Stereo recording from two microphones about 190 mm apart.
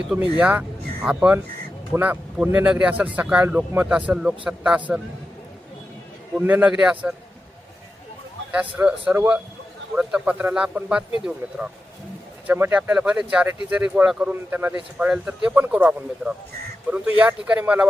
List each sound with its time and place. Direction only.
0.0 s a man's voice: 5° right (ahead or behind)
6.3 s speech: 10° right (ahead or behind)
8.7 s a man's voice: 5° right (ahead or behind)